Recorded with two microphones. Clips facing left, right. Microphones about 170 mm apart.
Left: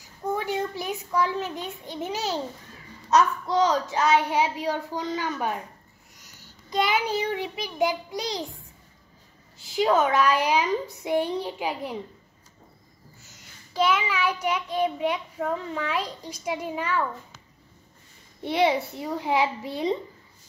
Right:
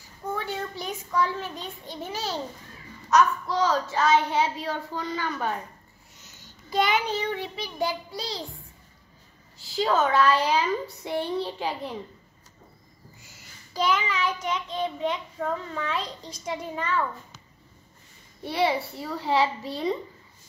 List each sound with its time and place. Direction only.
0.3 s a child's voice: 15° left (ahead or behind)
6.7 s a child's voice: centre (ahead or behind)
7.1 s a child's voice: 10° left (ahead or behind)
9.6 s a child's voice: 15° left (ahead or behind)
13.2 s child singing: 10° right (ahead or behind)
13.7 s a child's voice: 5° left (ahead or behind)
18.4 s a child's voice: 20° left (ahead or behind)